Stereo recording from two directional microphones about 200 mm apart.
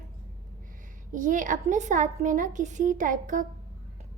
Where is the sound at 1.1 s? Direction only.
40° right (ahead or behind).